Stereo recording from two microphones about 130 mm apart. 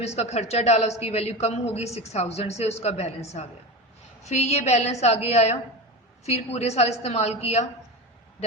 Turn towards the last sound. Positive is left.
turn(degrees=55)  # may be behind; listen again after turning